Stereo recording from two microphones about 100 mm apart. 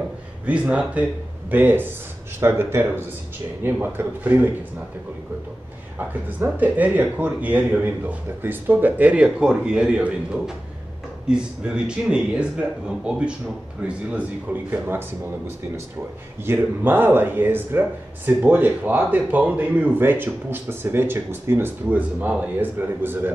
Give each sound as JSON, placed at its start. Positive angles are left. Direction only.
{"t": 0.5, "sound": "speech", "side_deg": -10}
{"t": 6.4, "sound": "speech", "side_deg": -15}
{"t": 16.4, "sound": "speech", "side_deg": -20}